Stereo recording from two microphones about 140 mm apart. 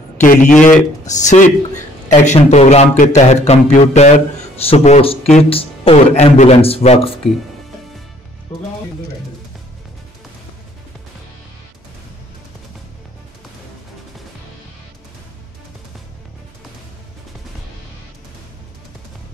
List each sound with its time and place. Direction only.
0.2 s a man's voice: 70° left (ahead or behind); by 7.2 s 45° left (ahead or behind)